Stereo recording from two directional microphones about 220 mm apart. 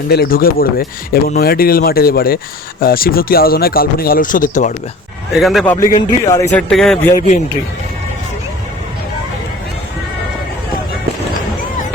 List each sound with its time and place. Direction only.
0.1 s speech: 45° left (ahead or behind)
5.3 s speech: centre (ahead or behind)
5.7 s a man's voice: 15° left (ahead or behind)
6.5 s speech: 5° left (ahead or behind)